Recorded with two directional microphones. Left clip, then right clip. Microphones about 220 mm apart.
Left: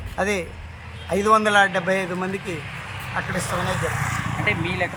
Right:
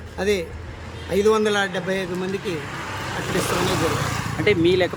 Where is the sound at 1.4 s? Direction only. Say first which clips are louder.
Left 4 dB; 5° right (ahead or behind).